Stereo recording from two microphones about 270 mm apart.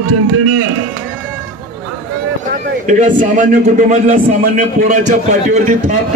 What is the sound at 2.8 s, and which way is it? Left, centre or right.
A man's voice, right.